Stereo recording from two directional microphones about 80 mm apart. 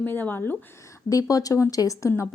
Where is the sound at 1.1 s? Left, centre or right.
Left.